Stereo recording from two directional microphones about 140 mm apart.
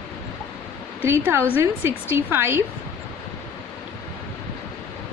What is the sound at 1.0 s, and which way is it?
A woman's voice, 15° right (ahead or behind).